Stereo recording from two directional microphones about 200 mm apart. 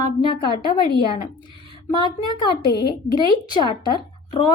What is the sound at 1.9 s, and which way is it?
A woman's voice, 20° left (ahead or behind).